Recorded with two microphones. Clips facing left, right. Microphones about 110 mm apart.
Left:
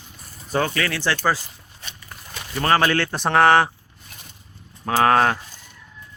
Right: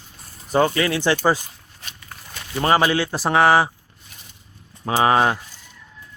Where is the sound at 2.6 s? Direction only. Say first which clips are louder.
Right 1 dB; 15° right (ahead or behind).